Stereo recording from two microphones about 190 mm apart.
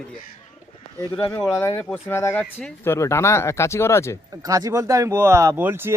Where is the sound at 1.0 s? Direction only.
15° left (ahead or behind).